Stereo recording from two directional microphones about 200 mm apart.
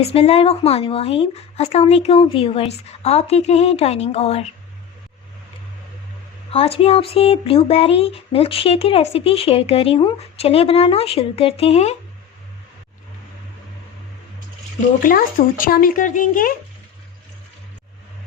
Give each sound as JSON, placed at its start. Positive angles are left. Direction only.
{"t": 0.0, "sound": "speech", "side_deg": 30}
{"t": 6.5, "sound": "speech", "side_deg": 30}
{"t": 15.0, "sound": "speech", "side_deg": 45}